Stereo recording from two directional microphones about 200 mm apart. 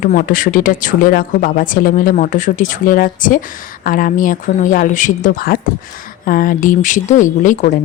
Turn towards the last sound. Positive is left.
turn(degrees=40)  # may be behind; listen again after turning